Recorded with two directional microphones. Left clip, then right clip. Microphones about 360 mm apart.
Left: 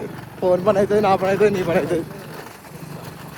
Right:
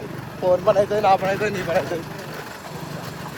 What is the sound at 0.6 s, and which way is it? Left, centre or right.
Speech, centre.